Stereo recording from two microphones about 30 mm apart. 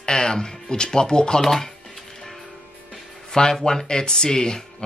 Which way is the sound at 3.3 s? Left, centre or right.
Left.